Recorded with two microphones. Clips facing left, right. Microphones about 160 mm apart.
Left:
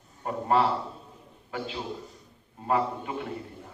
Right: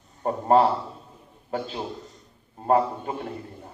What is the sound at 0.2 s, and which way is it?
A man's voice, 35° right (ahead or behind).